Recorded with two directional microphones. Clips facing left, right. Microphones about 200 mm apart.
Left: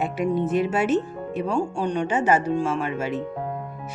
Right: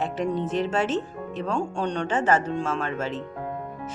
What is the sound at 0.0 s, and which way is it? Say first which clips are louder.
Speech: left 3 dB; 10° left (ahead or behind).